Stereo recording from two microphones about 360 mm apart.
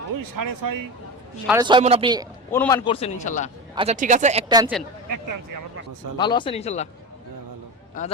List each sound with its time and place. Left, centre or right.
0.2 s speech: right
1.5 s speech: centre
2.5 s a man's voice: centre
3.8 s speech: centre
5.1 s speech: right
6.1 s a man's voice: centre
8.0 s a man's voice: left